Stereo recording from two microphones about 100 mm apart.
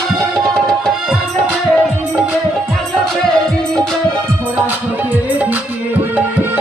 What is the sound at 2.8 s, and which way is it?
Music, 5° left (ahead or behind).